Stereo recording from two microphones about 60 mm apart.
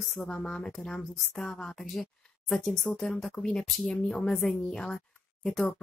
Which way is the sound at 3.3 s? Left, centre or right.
Centre.